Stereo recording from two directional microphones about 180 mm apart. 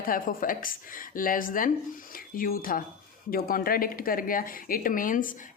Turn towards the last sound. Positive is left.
turn(degrees=50)  # may be behind; listen again after turning